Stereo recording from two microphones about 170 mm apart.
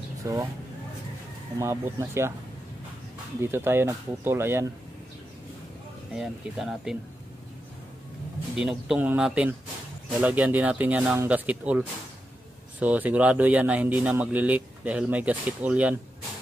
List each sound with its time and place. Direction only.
0.2 s speech: 20° right (ahead or behind)
1.6 s speech: 15° right (ahead or behind)
3.3 s speech: 15° right (ahead or behind)
6.1 s speech: centre (ahead or behind)
8.5 s speech: 5° right (ahead or behind)